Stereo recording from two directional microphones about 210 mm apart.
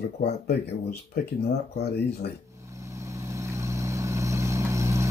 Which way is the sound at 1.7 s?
50° left (ahead or behind).